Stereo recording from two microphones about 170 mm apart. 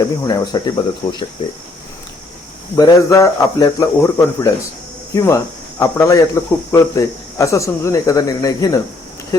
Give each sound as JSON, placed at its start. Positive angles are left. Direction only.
{"t": 0.0, "sound": "a man's voice", "side_deg": 20}
{"t": 2.7, "sound": "a man's voice", "side_deg": 20}